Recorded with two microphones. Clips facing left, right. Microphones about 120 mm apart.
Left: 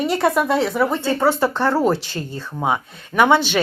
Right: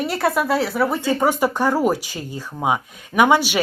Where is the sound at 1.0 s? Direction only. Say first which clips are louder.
Left 1 dB; 15° right (ahead or behind).